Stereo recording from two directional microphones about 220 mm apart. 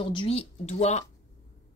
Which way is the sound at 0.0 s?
25° left (ahead or behind).